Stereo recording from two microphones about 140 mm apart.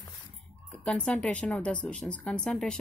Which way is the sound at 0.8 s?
10° left (ahead or behind).